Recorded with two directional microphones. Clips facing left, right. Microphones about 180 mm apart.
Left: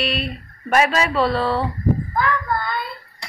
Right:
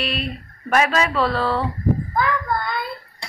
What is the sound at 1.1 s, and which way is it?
Speech, 25° left (ahead or behind).